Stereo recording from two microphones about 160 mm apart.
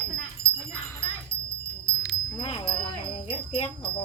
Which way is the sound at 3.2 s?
35° left (ahead or behind).